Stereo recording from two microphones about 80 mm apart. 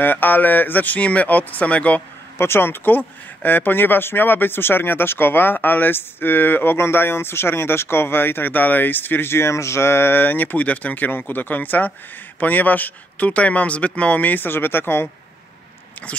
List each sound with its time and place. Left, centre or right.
0.0 s speech: left
2.3 s speech: left